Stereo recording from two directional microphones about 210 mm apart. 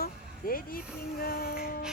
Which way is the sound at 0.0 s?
45° left (ahead or behind).